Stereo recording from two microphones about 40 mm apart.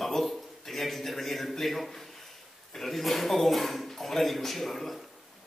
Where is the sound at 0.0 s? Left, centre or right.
Centre.